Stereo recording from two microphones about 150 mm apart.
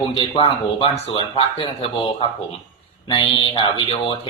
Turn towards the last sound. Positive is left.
turn(degrees=35)  # may be behind; listen again after turning